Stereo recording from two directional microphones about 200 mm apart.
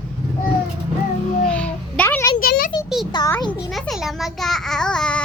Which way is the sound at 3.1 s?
20° left (ahead or behind).